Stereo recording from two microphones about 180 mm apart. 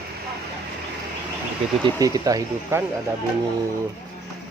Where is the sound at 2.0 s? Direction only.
20° right (ahead or behind).